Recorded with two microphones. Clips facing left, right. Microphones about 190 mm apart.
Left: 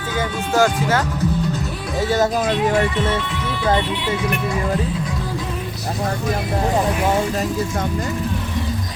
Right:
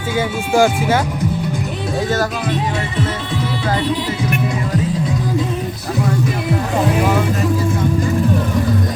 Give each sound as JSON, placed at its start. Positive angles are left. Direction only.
{"t": 0.2, "sound": "speech", "side_deg": -10}